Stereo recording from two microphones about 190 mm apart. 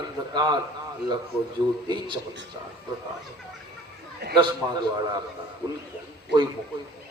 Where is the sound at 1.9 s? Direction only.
25° right (ahead or behind).